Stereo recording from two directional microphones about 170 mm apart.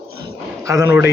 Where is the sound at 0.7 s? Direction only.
15° right (ahead or behind).